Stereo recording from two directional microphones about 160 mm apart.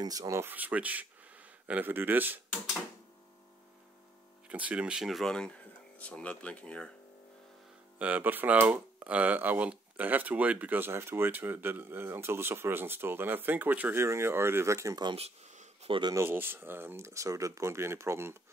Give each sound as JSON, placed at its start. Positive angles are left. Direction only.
{"t": 0.0, "sound": "speech", "side_deg": -20}
{"t": 4.5, "sound": "speech", "side_deg": -10}
{"t": 8.0, "sound": "speech", "side_deg": -10}
{"t": 15.1, "sound": "a sound", "side_deg": -45}
{"t": 15.9, "sound": "speech", "side_deg": -30}
{"t": 16.2, "sound": "speech", "side_deg": -15}